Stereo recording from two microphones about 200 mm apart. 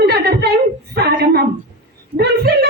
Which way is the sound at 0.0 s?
55° right (ahead or behind).